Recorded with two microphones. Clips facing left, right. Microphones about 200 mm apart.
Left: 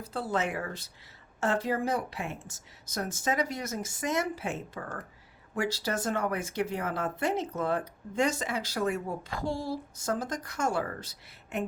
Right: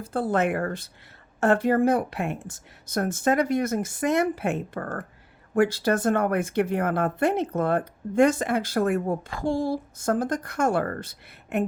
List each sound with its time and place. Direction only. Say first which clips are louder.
0.0 s speech: right 7 dB; 50° right (ahead or behind)